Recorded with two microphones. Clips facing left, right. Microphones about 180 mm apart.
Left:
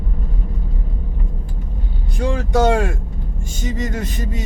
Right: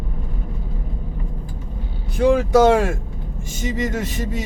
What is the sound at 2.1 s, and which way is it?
Speech, centre (ahead or behind).